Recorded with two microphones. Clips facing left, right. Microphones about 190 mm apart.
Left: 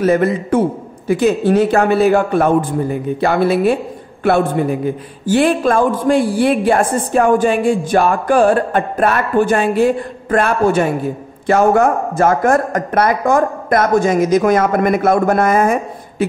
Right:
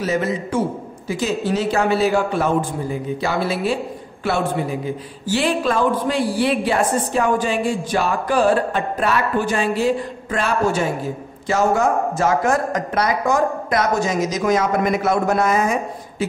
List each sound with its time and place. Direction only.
0.0 s a man's voice: 55° left (ahead or behind)